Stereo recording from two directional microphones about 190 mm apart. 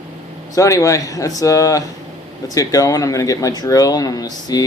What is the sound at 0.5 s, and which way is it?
Speech, 15° left (ahead or behind).